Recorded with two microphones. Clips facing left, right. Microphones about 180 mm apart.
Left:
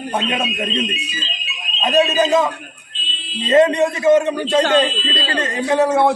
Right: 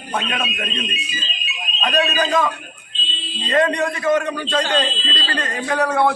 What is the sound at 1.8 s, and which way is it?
A man's voice, 25° left (ahead or behind).